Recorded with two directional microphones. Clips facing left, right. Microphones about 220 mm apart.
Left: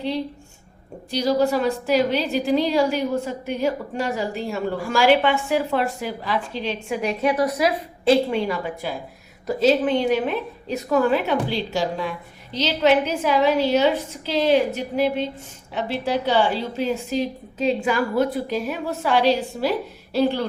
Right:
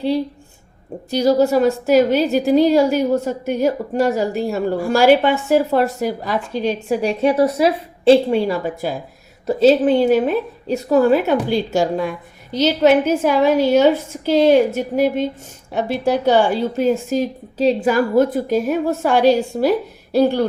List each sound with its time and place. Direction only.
1.1 s a woman's voice: 45° right (ahead or behind); by 9.7 s 30° right (ahead or behind)
9.8 s a woman's voice: 40° right (ahead or behind)